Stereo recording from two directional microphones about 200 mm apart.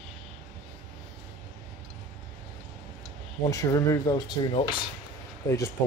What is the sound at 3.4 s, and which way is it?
Speech, 15° left (ahead or behind).